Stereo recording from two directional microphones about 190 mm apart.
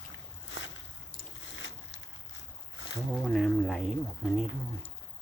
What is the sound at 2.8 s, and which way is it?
Boat, 75° left (ahead or behind).